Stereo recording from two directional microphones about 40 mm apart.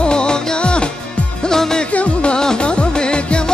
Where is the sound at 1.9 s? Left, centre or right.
Left.